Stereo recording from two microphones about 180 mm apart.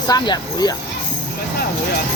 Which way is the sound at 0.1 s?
20° left (ahead or behind).